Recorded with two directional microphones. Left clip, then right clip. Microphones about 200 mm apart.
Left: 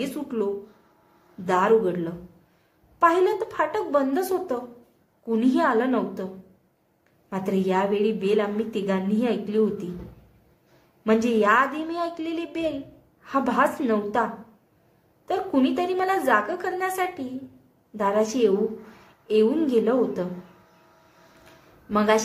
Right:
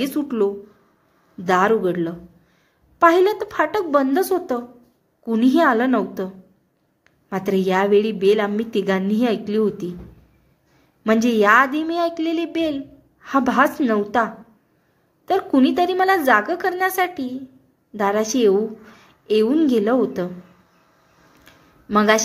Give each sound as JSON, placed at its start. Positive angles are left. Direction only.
{"t": 0.0, "sound": "a woman's voice", "side_deg": -30}
{"t": 11.1, "sound": "a woman's voice", "side_deg": -30}
{"t": 21.8, "sound": "a woman's voice", "side_deg": -25}